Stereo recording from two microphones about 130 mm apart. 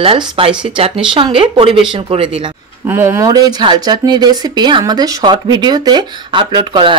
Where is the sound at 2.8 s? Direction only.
20° right (ahead or behind).